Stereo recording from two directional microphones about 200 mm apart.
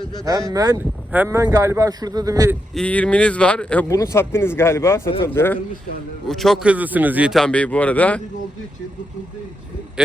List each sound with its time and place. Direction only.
0.5 s speech: 15° right (ahead or behind)
2.7 s a man's voice: 5° left (ahead or behind)